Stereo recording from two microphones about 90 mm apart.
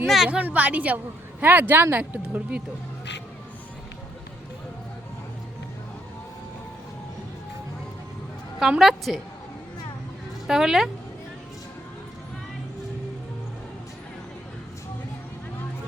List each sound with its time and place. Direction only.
0.0 s a woman's voice: centre (ahead or behind)
0.3 s a woman's voice: 15° right (ahead or behind)
8.5 s a woman's voice: 5° right (ahead or behind)
10.4 s a woman's voice: 5° right (ahead or behind)